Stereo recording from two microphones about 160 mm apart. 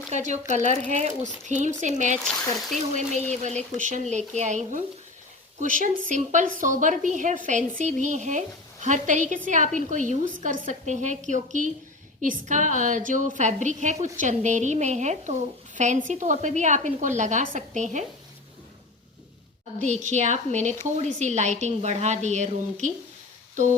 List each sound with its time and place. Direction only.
0.1 s a woman's voice: 50° right (ahead or behind)
19.8 s a woman's voice: 50° right (ahead or behind)